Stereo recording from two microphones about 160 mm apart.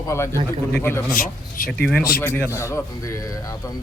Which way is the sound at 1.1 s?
60° left (ahead or behind).